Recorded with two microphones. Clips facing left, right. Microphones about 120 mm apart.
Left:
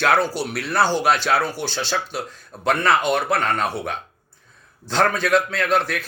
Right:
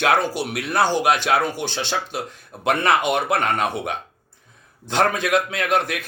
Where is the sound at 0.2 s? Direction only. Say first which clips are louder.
Left 1 dB; 15° right (ahead or behind).